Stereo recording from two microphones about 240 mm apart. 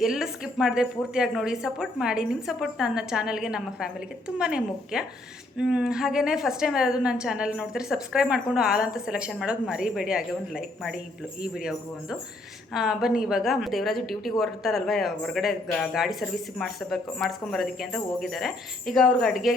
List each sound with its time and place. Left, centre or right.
0.0 s a woman's voice: centre